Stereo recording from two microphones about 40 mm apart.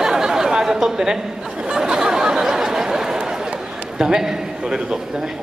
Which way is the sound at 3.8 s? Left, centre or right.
Centre.